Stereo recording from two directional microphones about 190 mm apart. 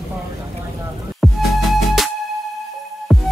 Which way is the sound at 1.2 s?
Centre (ahead or behind).